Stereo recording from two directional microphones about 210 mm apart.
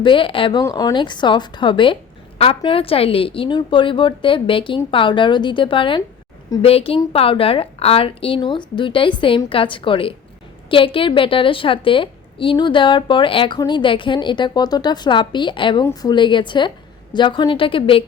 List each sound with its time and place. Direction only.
0.0 s a woman's voice: 25° left (ahead or behind)